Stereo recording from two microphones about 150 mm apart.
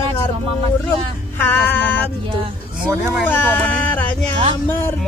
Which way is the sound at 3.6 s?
10° left (ahead or behind).